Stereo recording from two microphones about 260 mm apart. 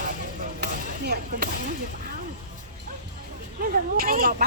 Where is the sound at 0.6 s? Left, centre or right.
Right.